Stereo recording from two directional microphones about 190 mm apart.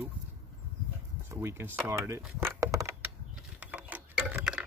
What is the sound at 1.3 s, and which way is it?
Speech, 15° right (ahead or behind).